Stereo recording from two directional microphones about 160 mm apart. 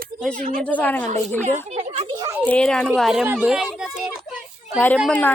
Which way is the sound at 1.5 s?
45° right (ahead or behind).